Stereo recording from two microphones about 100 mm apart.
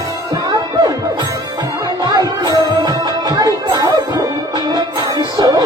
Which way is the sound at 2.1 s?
45° right (ahead or behind).